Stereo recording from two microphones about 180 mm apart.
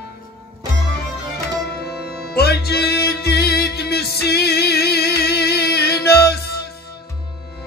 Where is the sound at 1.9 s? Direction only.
60° left (ahead or behind).